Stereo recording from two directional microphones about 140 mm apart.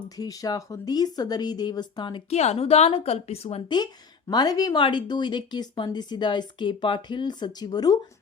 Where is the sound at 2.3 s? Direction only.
50° left (ahead or behind).